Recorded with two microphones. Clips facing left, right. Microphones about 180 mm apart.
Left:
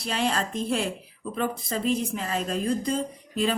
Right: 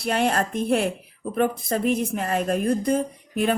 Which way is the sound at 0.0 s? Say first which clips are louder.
Right 5 dB; 55° right (ahead or behind).